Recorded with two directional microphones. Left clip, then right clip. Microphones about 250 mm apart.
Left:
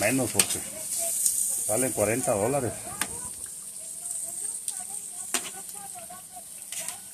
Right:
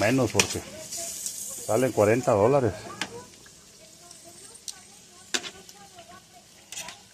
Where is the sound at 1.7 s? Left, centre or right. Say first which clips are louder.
Right 5 dB; right.